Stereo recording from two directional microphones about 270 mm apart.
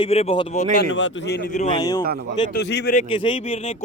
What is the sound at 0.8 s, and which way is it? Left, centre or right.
Speech, left.